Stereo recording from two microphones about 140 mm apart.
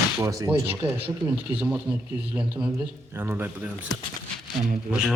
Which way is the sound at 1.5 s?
10° right (ahead or behind).